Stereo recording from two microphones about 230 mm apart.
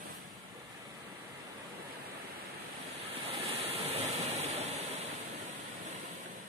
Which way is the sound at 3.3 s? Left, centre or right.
Right.